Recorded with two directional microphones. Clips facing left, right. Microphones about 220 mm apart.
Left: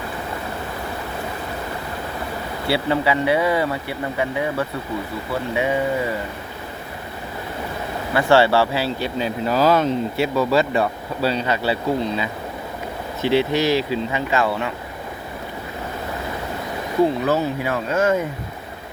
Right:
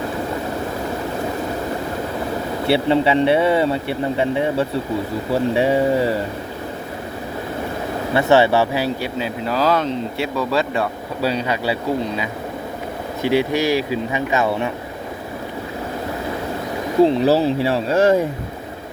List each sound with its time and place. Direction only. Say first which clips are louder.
2.6 s speech: right 4 dB; 25° right (ahead or behind)
8.1 s speech: right 1 dB; 20° right (ahead or behind)
9.1 s speech: left 1 dB; centre (ahead or behind)
11.2 s speech: even; 10° right (ahead or behind)
17.0 s speech: right 4 dB; 25° right (ahead or behind)